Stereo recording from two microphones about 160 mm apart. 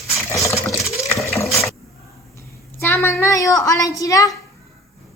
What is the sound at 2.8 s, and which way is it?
Child singing, 15° left (ahead or behind).